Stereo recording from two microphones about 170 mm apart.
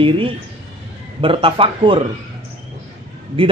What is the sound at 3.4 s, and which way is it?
Speech, 30° right (ahead or behind).